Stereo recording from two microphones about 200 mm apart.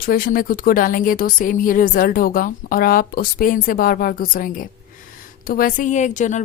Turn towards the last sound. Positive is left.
turn(degrees=35)  # may be behind; listen again after turning